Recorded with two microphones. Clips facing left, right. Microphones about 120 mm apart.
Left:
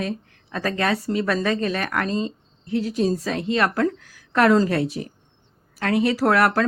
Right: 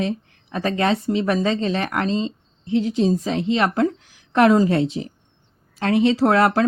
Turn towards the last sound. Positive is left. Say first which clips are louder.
# right 2 dB
turn(degrees=-20)  # may be behind; listen again after turning